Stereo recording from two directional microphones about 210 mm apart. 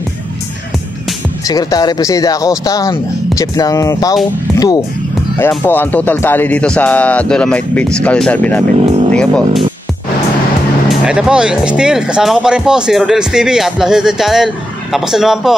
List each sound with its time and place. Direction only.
1.5 s speech: 20° left (ahead or behind)
10.9 s speech: 5° right (ahead or behind)